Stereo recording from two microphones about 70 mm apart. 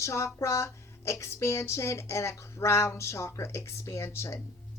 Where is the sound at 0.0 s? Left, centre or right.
Left.